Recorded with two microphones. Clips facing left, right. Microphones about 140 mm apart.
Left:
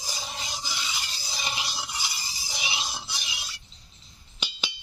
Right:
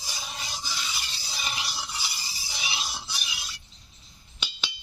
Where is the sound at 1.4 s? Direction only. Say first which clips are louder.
Left 1 dB; 20° left (ahead or behind).